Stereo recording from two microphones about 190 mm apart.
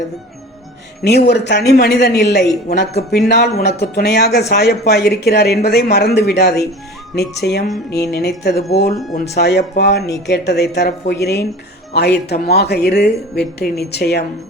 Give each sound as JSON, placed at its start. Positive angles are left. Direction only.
{"t": 1.0, "sound": "a woman's voice", "side_deg": 60}
{"t": 9.1, "sound": "speech", "side_deg": 35}
{"t": 9.4, "sound": "a woman's voice", "side_deg": 60}